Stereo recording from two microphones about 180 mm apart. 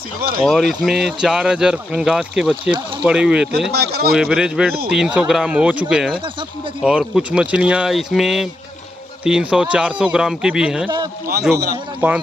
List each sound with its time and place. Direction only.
0.4 s speech: centre (ahead or behind)
3.7 s speech: 60° right (ahead or behind)
4.1 s speech: 5° right (ahead or behind)
12.0 s speech: 10° right (ahead or behind)